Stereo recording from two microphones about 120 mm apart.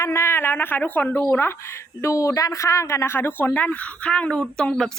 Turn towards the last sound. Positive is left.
turn(degrees=5)  # may be behind; listen again after turning